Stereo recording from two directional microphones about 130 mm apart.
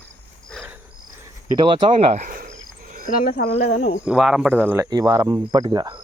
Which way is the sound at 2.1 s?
80° right.